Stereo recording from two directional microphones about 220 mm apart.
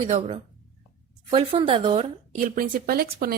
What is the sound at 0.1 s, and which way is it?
Speech, 30° right (ahead or behind).